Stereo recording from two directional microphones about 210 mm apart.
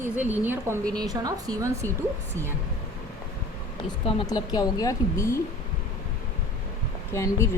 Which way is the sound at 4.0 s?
25° left (ahead or behind).